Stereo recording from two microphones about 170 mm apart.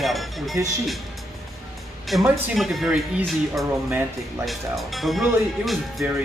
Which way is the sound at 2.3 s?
Centre (ahead or behind).